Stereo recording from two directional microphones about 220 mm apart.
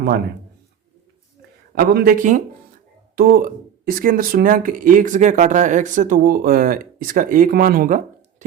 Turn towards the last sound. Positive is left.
turn(degrees=-40)  # may be behind; listen again after turning